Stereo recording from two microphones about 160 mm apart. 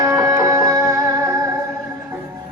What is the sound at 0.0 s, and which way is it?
Music, 20° right (ahead or behind).